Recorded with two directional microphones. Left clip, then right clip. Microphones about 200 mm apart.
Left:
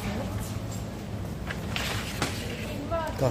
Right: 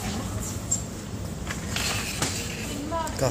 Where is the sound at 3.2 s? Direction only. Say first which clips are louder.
Right 2 dB; 15° left (ahead or behind).